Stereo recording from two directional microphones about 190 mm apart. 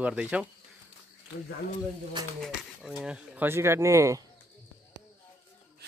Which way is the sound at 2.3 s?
Centre (ahead or behind).